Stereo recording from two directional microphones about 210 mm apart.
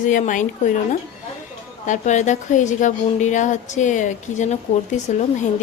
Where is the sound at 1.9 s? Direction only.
35° left (ahead or behind).